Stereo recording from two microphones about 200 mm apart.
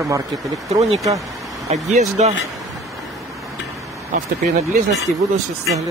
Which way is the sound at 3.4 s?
15° right (ahead or behind).